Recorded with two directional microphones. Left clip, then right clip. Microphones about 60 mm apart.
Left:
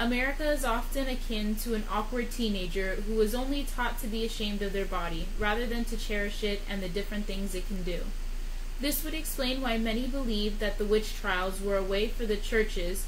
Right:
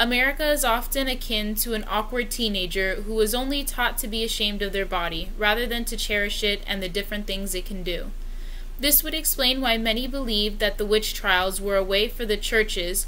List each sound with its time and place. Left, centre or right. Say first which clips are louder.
0.0 s a woman's voice: right 8 dB; right
8.8 s a woman's voice: right 9 dB; right